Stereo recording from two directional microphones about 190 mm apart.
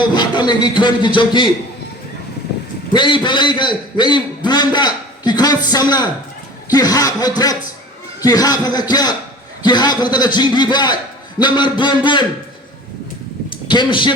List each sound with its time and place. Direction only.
0.0 s speech: 25° left (ahead or behind)
2.9 s a man's voice: 25° left (ahead or behind)
13.7 s speech: 25° left (ahead or behind)